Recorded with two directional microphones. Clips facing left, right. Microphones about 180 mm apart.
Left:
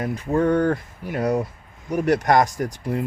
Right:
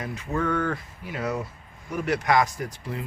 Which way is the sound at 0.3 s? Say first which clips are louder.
Left 7 dB; 35° left (ahead or behind).